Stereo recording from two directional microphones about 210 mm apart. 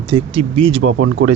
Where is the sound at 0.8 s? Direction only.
65° right (ahead or behind).